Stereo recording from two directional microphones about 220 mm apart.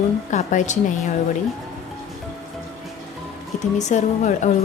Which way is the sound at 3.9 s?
30° left (ahead or behind).